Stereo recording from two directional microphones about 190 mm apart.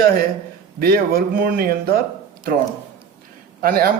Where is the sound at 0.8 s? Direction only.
55° right (ahead or behind).